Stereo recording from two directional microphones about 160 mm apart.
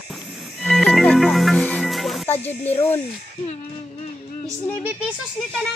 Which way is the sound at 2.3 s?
10° left (ahead or behind).